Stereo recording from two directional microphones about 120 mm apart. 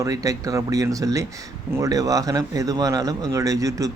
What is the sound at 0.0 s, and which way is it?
Speech, 30° right (ahead or behind).